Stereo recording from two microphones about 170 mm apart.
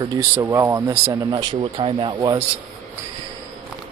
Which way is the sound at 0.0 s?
20° right (ahead or behind).